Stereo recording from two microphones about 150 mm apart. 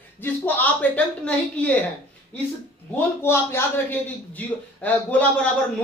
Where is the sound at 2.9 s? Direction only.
15° left (ahead or behind).